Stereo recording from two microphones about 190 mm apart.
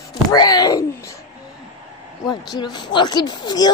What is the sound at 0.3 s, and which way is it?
Wail, 20° left (ahead or behind).